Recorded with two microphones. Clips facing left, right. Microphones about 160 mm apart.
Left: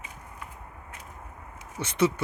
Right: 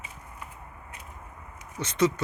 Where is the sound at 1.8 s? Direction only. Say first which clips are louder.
Even; 10° left (ahead or behind).